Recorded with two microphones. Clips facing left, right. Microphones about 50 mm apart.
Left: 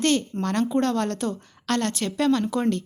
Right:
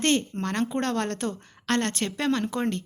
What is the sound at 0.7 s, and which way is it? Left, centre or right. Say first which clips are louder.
A woman's voice: left 4 dB; right.